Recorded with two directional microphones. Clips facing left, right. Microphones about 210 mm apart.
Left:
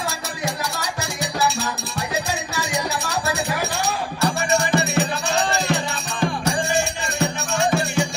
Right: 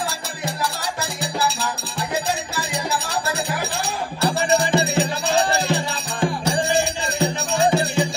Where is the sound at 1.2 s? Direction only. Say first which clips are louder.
Left 2 dB; 30° right (ahead or behind).